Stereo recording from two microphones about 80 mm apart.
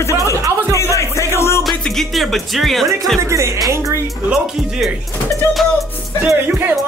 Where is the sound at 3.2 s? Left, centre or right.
Right.